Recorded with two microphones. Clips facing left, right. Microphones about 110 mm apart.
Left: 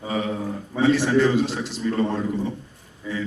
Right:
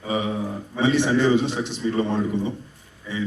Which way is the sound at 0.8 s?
20° right (ahead or behind).